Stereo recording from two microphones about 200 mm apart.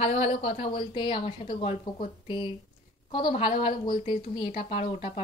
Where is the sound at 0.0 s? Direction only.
30° left (ahead or behind).